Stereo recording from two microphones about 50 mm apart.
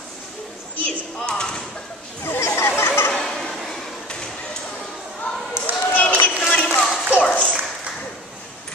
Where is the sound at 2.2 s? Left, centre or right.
Left.